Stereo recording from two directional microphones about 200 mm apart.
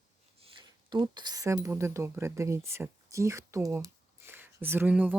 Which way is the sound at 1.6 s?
15° right (ahead or behind).